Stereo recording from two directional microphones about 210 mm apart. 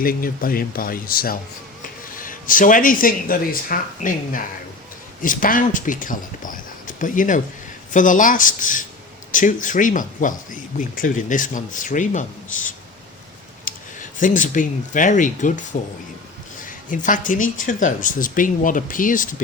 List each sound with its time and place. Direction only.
0.0 s speech: 45° left (ahead or behind)
13.7 s a sound: 40° left (ahead or behind)
14.2 s speech: 40° left (ahead or behind)
16.6 s speech: 40° left (ahead or behind)